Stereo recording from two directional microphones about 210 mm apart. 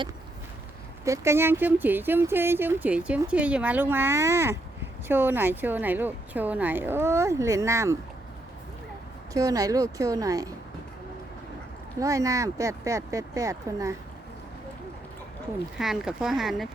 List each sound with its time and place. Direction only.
1.0 s speech: 15° right (ahead or behind)
9.3 s speech: 15° right (ahead or behind)
11.9 s speech: 15° right (ahead or behind)
15.8 s speech: centre (ahead or behind)